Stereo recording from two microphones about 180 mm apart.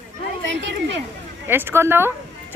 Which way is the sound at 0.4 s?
85° right.